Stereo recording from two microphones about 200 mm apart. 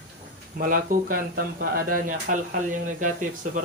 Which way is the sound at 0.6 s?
45° right (ahead or behind).